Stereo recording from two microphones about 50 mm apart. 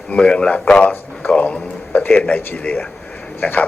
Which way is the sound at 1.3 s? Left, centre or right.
Left.